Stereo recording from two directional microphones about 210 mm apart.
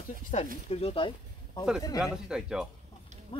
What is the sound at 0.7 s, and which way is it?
Speech, 30° left (ahead or behind).